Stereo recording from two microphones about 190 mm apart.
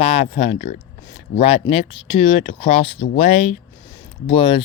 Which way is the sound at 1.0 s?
20° left (ahead or behind).